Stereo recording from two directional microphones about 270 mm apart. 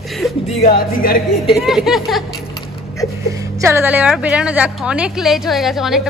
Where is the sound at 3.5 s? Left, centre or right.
Centre.